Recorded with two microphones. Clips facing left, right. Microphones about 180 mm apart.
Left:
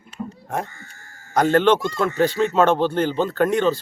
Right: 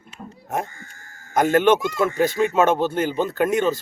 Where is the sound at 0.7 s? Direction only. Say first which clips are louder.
Right 1 dB; 50° right (ahead or behind).